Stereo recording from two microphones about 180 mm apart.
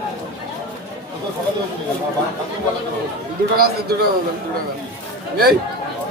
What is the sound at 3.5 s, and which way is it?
Speech, 60° right (ahead or behind).